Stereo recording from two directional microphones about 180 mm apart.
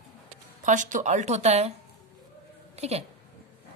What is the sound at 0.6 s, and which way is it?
Speech, 45° right (ahead or behind).